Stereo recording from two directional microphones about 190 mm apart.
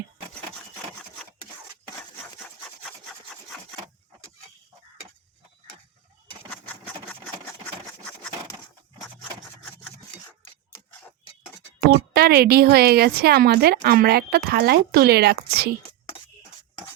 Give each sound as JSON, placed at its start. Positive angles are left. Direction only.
{"t": 12.1, "sound": "a woman's voice", "side_deg": -55}